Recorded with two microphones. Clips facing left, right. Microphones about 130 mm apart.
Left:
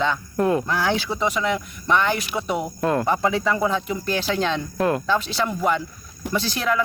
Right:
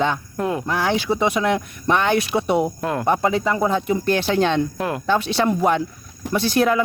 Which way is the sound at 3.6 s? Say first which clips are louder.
Right 3 dB; 50° right (ahead or behind).